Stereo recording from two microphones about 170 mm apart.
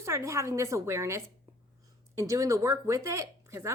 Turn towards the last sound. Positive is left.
turn(degrees=-15)  # may be behind; listen again after turning